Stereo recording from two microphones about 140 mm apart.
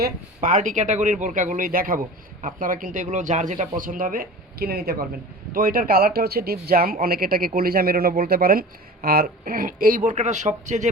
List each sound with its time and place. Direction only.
0.0 s speech: 70° right (ahead or behind); by 2.0 s 90° right
2.4 s speech: 75° right (ahead or behind); by 10.8 s 60° right (ahead or behind)